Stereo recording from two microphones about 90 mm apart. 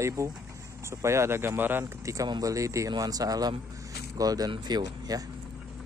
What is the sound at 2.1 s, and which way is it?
Speech, 40° right (ahead or behind).